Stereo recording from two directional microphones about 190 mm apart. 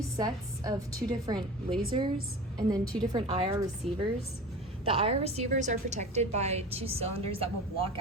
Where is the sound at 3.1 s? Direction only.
30° right (ahead or behind).